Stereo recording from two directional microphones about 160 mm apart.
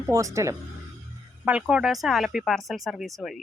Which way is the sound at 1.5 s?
5° right (ahead or behind).